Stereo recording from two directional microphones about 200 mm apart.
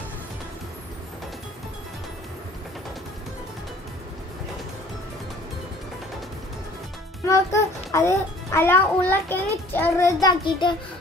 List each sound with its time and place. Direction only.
7.2 s a child's voice: 15° left (ahead or behind)